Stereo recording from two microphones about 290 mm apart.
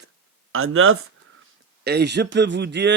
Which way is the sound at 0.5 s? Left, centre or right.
Right.